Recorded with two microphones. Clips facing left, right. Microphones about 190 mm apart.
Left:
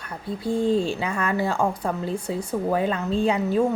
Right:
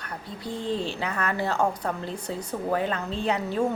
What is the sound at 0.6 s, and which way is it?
Speech, 45° left (ahead or behind).